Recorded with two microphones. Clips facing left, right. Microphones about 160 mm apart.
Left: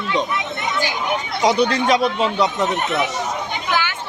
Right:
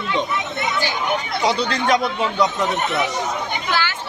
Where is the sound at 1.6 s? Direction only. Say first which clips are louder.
Left 3 dB; 20° left (ahead or behind).